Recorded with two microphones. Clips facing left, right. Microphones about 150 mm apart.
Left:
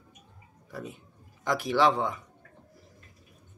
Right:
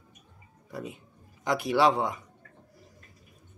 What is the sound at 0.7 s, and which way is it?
Speech, 10° right (ahead or behind).